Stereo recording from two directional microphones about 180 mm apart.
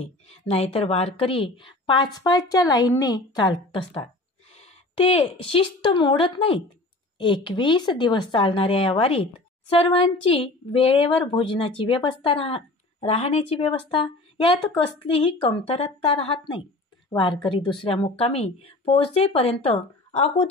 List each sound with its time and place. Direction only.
0.0 s speech: 35° left (ahead or behind)